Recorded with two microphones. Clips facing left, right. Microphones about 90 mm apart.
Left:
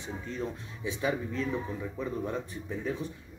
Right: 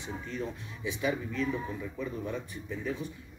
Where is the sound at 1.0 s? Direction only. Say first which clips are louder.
Even; 35° left (ahead or behind).